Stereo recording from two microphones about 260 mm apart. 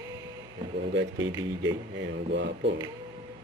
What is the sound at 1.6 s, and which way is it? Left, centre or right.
Speech, right.